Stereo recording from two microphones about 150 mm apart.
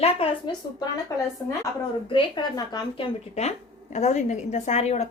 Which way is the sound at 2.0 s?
30° left (ahead or behind).